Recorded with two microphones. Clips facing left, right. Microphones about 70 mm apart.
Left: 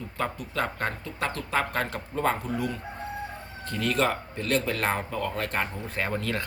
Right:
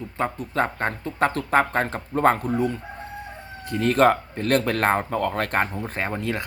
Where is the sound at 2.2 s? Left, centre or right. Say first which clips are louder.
Right 8 dB; right.